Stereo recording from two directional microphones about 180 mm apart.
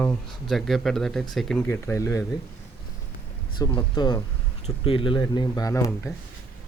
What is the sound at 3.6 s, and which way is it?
Speech, 25° left (ahead or behind).